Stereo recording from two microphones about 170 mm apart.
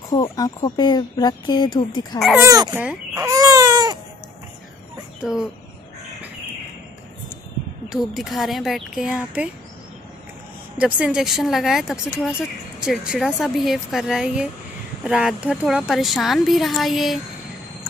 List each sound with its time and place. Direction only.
0.2 s speech: 25° left (ahead or behind)
2.1 s speech: centre (ahead or behind)
2.4 s speech: 20° right (ahead or behind)
2.7 s speech: 10° right (ahead or behind)
3.2 s baby cry: 20° right (ahead or behind)
5.2 s speech: centre (ahead or behind)
7.9 s speech: centre (ahead or behind)
10.8 s speech: 5° right (ahead or behind)